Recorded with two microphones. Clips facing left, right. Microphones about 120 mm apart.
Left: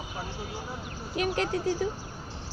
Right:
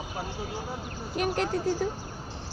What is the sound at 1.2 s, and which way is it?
Speech, 40° right (ahead or behind).